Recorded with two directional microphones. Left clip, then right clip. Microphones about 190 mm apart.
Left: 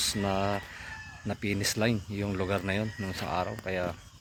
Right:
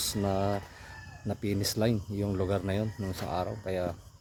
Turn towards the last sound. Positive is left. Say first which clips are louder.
# even
turn(degrees=0)  # may be behind; listen again after turning